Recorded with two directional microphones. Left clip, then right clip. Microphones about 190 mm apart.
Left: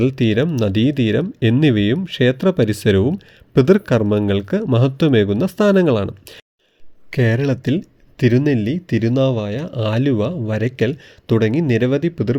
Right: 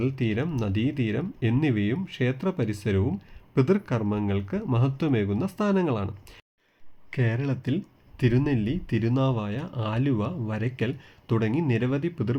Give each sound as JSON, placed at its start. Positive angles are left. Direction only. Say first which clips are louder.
{"t": 0.0, "sound": "speech", "louder": "left 11 dB", "side_deg": 45}